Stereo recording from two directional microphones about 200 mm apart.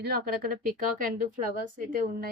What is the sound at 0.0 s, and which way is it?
Speech, 50° right (ahead or behind).